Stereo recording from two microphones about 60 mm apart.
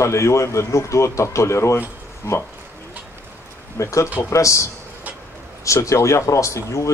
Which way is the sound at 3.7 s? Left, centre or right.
Left.